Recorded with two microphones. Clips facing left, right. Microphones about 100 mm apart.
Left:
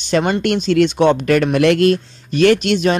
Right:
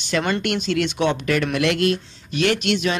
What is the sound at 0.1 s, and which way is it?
Speech, 25° left (ahead or behind).